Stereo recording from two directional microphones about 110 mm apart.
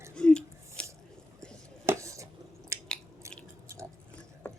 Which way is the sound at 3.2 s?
25° right (ahead or behind).